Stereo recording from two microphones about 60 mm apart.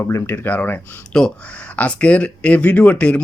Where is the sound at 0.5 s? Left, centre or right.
Left.